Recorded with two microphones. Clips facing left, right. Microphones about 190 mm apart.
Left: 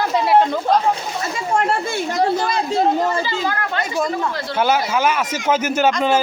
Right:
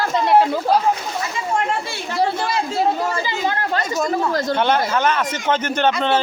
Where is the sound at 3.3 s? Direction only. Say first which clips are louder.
Right 1 dB; 25° right (ahead or behind).